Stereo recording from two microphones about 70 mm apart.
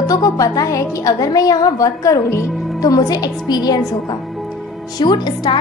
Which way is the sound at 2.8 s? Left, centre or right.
Left.